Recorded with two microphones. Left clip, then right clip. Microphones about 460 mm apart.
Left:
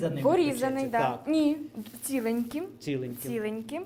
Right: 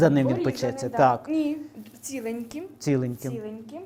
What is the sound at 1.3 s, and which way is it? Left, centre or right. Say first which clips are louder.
Speech: left 1 dB; left.